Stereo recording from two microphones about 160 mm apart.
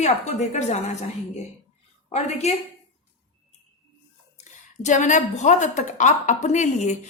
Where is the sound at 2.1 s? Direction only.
45° left (ahead or behind).